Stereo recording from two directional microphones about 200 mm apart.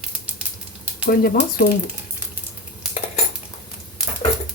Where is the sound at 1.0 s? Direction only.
45° left (ahead or behind).